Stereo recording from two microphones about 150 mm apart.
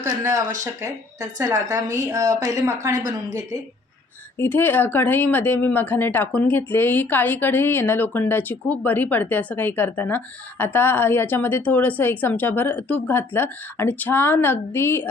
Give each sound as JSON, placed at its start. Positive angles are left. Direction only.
{"t": 0.0, "sound": "a woman's voice", "side_deg": -20}
{"t": 4.4, "sound": "speech", "side_deg": 10}